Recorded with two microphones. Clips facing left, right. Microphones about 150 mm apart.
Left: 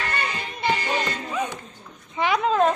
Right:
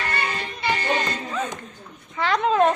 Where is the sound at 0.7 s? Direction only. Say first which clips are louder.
Right 1 dB; 10° left (ahead or behind).